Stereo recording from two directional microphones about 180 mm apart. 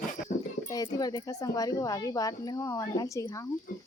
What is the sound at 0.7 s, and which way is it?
A woman's voice, 20° left (ahead or behind).